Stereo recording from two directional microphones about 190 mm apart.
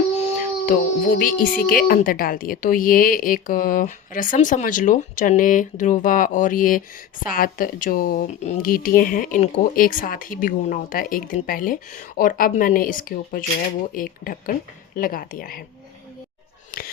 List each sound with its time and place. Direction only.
0.6 s a woman's voice: 45° left (ahead or behind)